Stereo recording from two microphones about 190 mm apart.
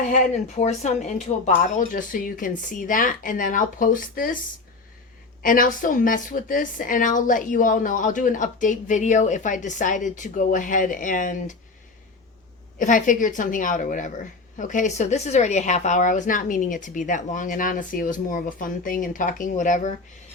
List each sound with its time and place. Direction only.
0.1 s a woman's voice: 35° left (ahead or behind)
5.4 s a woman's voice: 45° left (ahead or behind)
12.8 s a woman's voice: 45° left (ahead or behind)